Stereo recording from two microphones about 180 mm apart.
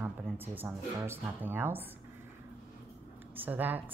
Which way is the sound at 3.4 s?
10° right (ahead or behind).